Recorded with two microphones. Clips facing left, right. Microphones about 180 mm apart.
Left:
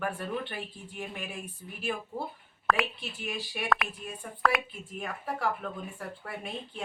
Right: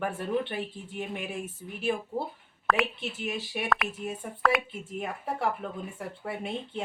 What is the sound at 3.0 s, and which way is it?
Speech, 20° right (ahead or behind).